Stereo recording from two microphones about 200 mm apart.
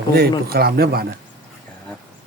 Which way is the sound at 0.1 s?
50° right (ahead or behind).